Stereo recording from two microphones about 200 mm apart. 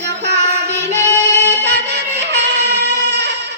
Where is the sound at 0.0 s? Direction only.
55° right (ahead or behind).